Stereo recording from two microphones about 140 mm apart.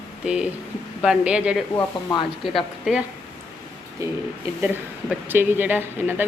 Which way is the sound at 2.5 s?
5° right (ahead or behind).